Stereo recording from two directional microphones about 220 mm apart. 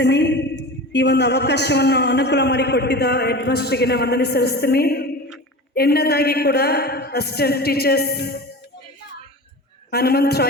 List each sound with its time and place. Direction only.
0.0 s a man's voice: 50° left (ahead or behind)
9.9 s a man's voice: 45° left (ahead or behind)